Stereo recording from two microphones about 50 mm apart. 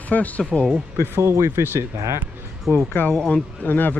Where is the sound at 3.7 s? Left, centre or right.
Left.